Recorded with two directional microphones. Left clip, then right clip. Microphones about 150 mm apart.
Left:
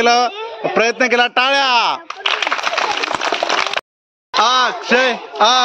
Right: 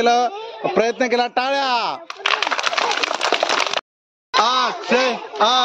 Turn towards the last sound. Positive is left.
turn(degrees=10)  # may be behind; listen again after turning